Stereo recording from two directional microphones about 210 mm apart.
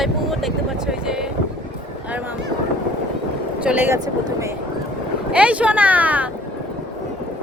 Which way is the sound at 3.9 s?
20° right (ahead or behind).